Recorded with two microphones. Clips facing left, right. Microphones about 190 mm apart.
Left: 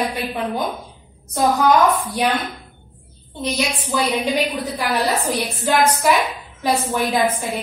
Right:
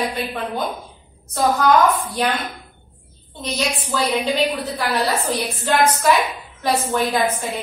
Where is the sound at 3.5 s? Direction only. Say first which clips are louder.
Even; 15° left (ahead or behind).